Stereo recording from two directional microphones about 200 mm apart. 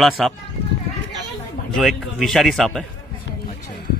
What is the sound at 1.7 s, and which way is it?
Speech, centre (ahead or behind).